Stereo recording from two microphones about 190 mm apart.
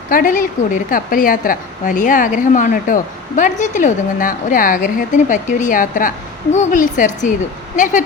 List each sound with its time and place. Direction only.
0.1 s a woman's voice: 45° left (ahead or behind)